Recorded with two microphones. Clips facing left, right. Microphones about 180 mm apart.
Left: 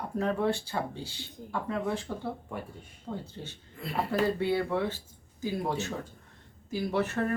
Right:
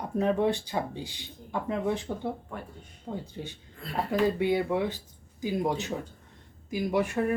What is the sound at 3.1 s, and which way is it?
Speech, 15° right (ahead or behind).